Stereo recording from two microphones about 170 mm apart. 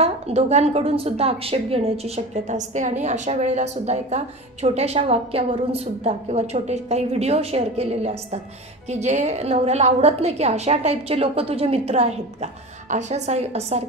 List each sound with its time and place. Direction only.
0.0 s a woman's voice: 40° right (ahead or behind)